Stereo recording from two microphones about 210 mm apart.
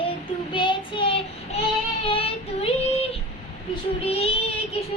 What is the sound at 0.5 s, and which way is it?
Child singing, 20° left (ahead or behind).